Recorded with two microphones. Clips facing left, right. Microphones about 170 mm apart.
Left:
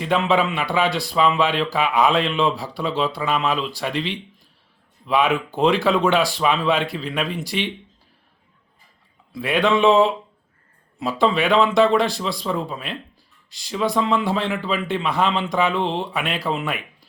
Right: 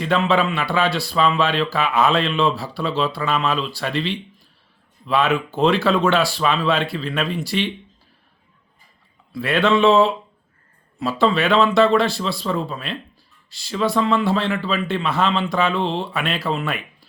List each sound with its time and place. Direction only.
0.0 s speech: 15° left (ahead or behind)
9.3 s speech: 15° left (ahead or behind)